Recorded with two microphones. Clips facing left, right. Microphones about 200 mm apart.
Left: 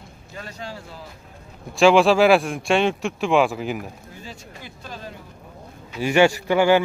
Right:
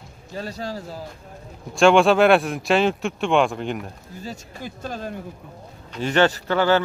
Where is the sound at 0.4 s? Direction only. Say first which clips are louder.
Right 5 dB; 35° right (ahead or behind).